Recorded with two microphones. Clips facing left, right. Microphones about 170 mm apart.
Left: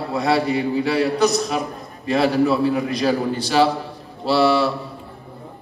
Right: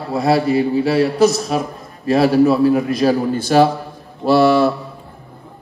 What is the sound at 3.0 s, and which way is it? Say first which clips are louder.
A man's voice: right 4 dB; 45° right (ahead or behind).